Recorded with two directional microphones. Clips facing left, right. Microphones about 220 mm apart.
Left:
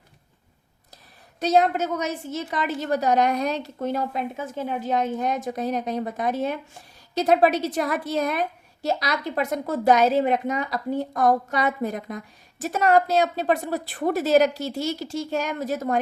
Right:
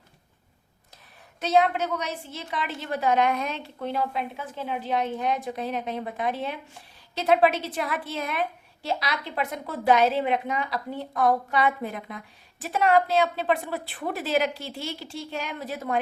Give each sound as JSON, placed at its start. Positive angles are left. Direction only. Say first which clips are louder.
{"t": 1.4, "sound": "a woman's voice", "louder": "left 2 dB", "side_deg": 40}